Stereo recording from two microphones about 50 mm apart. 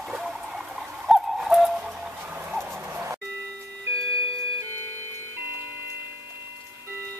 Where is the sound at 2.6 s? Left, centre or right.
Right.